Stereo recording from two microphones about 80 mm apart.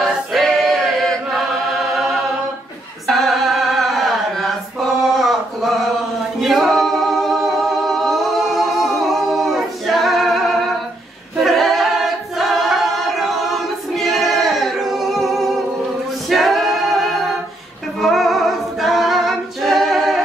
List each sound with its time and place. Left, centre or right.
0.0 s choir: centre
3.1 s chant: centre
5.1 s a sound: centre
6.4 s singing: centre
11.3 s a capella: centre